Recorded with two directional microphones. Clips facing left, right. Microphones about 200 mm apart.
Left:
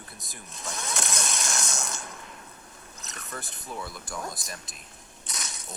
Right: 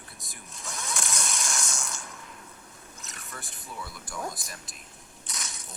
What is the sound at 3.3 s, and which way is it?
Speech, 45° left (ahead or behind).